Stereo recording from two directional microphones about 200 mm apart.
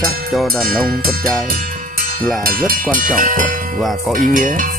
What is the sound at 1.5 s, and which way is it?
Music, 45° right (ahead or behind).